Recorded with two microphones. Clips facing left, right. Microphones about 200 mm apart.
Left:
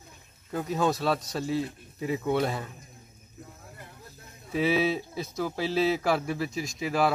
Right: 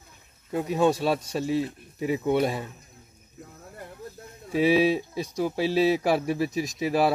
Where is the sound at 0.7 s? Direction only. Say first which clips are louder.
Right 4 dB; 30° right (ahead or behind).